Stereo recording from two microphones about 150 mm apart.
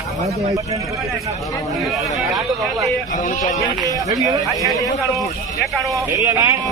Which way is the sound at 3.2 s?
60° left (ahead or behind).